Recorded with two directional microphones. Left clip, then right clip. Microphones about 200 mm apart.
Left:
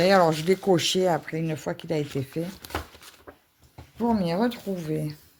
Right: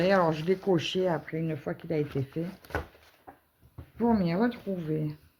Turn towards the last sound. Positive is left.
turn(degrees=40)  # may be behind; listen again after turning